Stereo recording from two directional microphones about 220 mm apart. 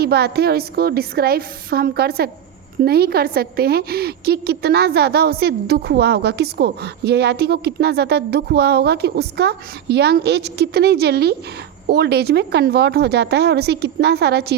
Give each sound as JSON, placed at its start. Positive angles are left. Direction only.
{"t": 0.0, "sound": "a woman's voice", "side_deg": -45}